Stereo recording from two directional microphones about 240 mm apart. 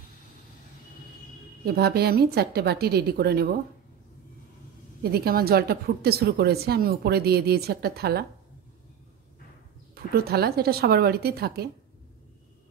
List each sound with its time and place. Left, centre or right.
1.6 s a woman's voice: right
5.0 s a woman's voice: right
9.9 s a woman's voice: right